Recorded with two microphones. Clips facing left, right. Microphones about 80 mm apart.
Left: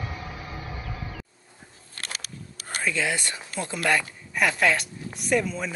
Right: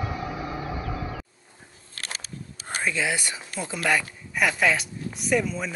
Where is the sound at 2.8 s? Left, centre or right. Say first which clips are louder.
Even; centre.